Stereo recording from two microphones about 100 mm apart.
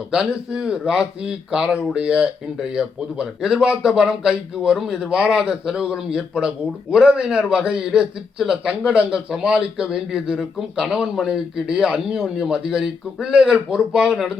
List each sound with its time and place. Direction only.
0.1 s a man's voice: 5° right (ahead or behind)